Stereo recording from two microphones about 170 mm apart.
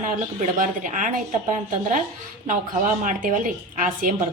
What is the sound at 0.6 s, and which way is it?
Speech, 50° right (ahead or behind).